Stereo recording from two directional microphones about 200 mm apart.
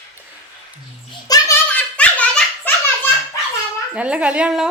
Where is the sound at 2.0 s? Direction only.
5° left (ahead or behind).